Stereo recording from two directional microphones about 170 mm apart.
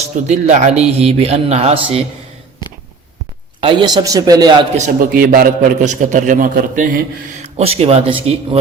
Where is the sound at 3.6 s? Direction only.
30° right (ahead or behind).